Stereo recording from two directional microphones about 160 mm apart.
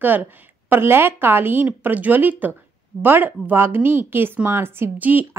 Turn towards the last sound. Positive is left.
turn(degrees=-10)  # may be behind; listen again after turning